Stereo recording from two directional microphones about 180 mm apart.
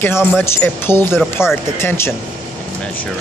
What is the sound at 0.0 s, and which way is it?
Speech, 10° left (ahead or behind).